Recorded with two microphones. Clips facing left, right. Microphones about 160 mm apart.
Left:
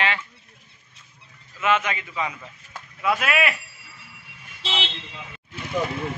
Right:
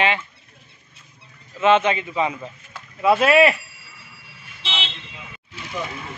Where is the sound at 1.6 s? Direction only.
25° right (ahead or behind).